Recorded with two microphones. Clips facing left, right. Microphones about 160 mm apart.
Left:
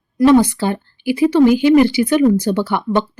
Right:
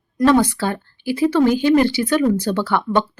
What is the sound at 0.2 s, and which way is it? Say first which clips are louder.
Speech: left 4 dB; 15° left (ahead or behind).